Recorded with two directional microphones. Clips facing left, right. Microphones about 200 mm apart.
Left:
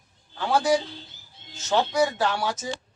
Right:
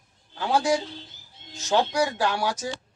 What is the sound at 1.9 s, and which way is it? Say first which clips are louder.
Speech: left 1 dB; 10° right (ahead or behind).